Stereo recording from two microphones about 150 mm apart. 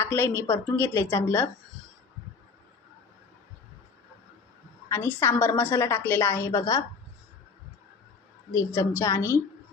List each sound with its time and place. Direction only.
0.0 s a woman's voice: 15° left (ahead or behind)
4.9 s a woman's voice: 15° left (ahead or behind)
8.5 s a woman's voice: 20° left (ahead or behind)